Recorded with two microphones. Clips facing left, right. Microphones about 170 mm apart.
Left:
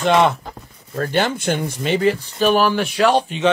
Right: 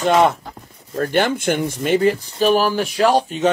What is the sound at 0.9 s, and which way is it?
Speech, 50° right (ahead or behind).